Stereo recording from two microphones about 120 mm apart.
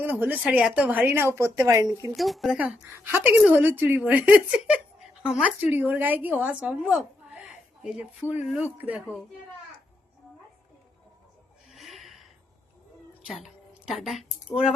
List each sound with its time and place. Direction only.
0.0 s speech: 15° right (ahead or behind)
2.1 s speech: centre (ahead or behind)
2.8 s speech: 20° right (ahead or behind)
11.7 s a sound: centre (ahead or behind)
13.2 s a woman's voice: 5° right (ahead or behind)